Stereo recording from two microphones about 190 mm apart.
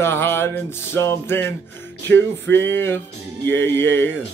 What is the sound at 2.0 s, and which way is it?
Music, 70° right (ahead or behind).